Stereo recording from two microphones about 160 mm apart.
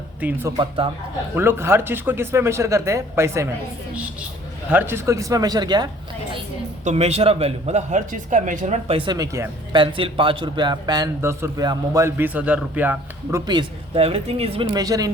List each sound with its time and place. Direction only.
0.2 s speech: 10° right (ahead or behind)
4.7 s a man's voice: 10° right (ahead or behind)
6.8 s speech: 40° right (ahead or behind)
9.1 s a man's voice: 20° right (ahead or behind)
9.7 s a man's voice: 30° right (ahead or behind); by 13.4 s 10° right (ahead or behind)
13.5 s speech: 30° right (ahead or behind)
14.7 s a man's voice: 25° right (ahead or behind)